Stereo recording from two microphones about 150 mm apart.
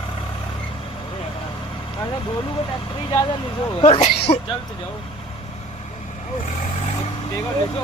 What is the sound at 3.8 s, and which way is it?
Speech, 40° left (ahead or behind).